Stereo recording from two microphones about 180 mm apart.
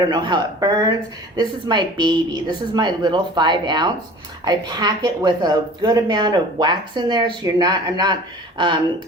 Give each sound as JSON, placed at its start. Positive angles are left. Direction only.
{"t": 0.1, "sound": "speech", "side_deg": -25}